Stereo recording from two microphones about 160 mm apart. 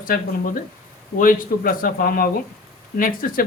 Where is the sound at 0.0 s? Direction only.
60° left (ahead or behind).